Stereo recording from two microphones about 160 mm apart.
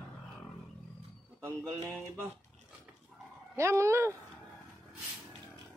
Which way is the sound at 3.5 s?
15° right (ahead or behind).